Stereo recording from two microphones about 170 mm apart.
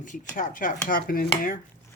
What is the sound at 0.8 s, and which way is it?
Dishes, 55° left (ahead or behind).